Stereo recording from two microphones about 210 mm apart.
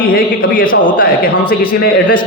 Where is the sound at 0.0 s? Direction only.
45° left (ahead or behind).